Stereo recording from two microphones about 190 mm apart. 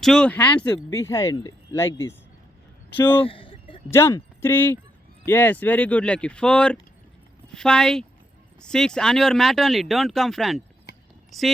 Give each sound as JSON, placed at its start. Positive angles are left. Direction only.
{"t": 0.0, "sound": "speech", "side_deg": 5}
{"t": 3.2, "sound": "a sound", "side_deg": 25}
{"t": 3.9, "sound": "speech", "side_deg": 15}
{"t": 10.9, "sound": "clip-clop", "side_deg": 65}
{"t": 11.3, "sound": "speech", "side_deg": 0}